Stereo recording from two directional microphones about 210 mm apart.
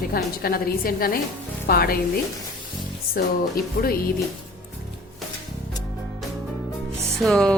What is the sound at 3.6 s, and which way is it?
Speech, 45° left (ahead or behind).